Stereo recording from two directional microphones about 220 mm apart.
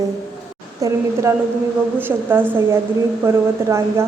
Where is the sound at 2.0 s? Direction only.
10° right (ahead or behind).